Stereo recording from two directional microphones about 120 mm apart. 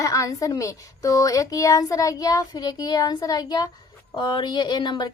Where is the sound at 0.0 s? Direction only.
30° left (ahead or behind).